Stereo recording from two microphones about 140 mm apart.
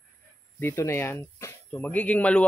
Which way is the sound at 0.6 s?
20° left (ahead or behind).